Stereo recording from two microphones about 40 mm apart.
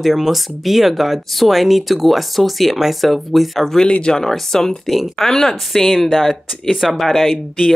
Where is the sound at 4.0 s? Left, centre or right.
Centre.